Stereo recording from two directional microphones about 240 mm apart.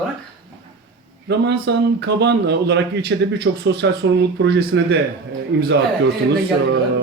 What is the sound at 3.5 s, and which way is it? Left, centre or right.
Speech, right.